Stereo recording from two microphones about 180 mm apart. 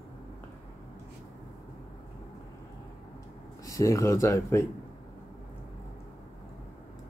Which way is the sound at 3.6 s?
20° left (ahead or behind).